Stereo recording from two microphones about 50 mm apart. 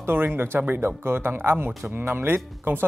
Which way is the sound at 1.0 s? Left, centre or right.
Right.